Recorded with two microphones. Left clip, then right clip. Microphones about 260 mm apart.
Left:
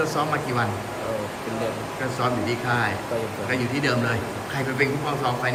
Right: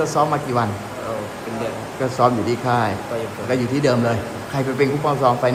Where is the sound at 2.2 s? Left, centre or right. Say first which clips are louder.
Right 8 dB; centre.